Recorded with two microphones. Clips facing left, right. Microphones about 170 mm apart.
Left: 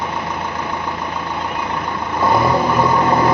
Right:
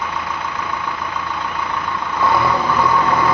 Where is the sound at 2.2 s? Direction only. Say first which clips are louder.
Left 2 dB; 30° left (ahead or behind).